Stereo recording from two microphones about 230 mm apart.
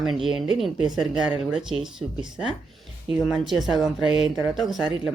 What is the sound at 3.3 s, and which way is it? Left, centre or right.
Speech, centre.